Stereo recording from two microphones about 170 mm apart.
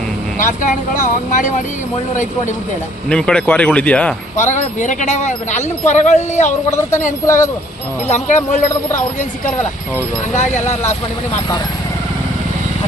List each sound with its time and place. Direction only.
0.3 s speech: 50° left (ahead or behind)
3.1 s speech: 5° left (ahead or behind)
4.4 s speech: 45° left (ahead or behind)
10.3 s speech: 45° left (ahead or behind)